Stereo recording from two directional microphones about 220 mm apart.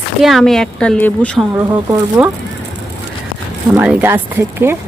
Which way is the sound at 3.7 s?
5° right (ahead or behind).